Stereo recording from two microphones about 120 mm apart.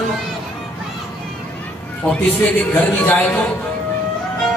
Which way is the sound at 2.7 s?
15° left (ahead or behind).